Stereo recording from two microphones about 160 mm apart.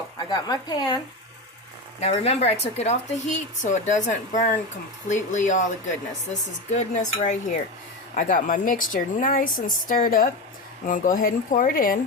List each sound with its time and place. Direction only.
0.3 s speech: 25° left (ahead or behind)
2.0 s a woman's voice: 40° left (ahead or behind); by 11.9 s 60° left (ahead or behind)